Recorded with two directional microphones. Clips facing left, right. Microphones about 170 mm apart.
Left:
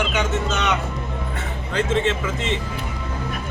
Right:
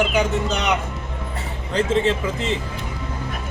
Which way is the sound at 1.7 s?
35° right (ahead or behind).